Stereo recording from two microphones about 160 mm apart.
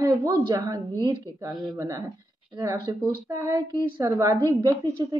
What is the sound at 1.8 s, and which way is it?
Speech, 20° right (ahead or behind).